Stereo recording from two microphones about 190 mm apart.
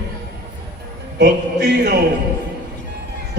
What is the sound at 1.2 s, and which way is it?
Music, 60° right (ahead or behind).